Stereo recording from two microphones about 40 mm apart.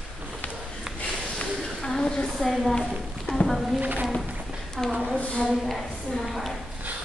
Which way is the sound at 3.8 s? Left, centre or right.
Right.